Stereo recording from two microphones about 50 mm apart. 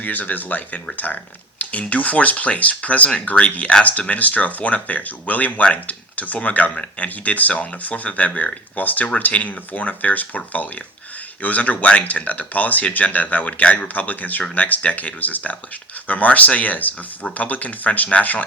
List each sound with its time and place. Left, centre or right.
0.0 s speech: left